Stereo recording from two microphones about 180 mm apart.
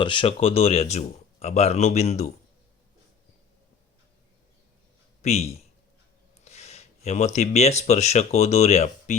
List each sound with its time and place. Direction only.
0.0 s speech: 30° left (ahead or behind)
5.2 s speech: 35° left (ahead or behind)